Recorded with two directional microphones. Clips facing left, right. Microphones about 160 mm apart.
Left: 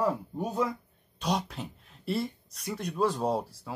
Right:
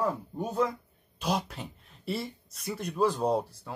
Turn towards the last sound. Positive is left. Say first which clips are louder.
# right 2 dB
turn(degrees=0)  # may be behind; listen again after turning